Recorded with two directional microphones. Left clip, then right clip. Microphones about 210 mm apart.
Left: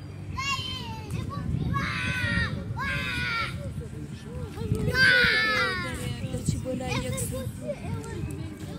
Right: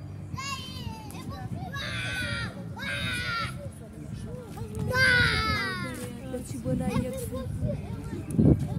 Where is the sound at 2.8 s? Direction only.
35° right (ahead or behind).